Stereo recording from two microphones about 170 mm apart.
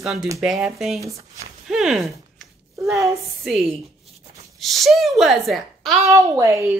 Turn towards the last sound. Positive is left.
turn(degrees=-15)  # may be behind; listen again after turning